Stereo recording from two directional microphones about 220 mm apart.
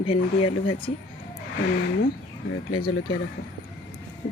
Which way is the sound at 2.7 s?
90° left.